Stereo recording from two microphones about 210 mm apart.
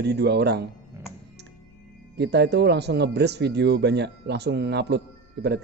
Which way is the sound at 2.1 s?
55° right (ahead or behind).